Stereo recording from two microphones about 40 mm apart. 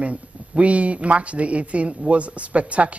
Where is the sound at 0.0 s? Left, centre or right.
Right.